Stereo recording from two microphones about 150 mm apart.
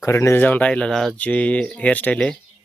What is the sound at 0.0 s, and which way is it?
Speech, 20° left (ahead or behind).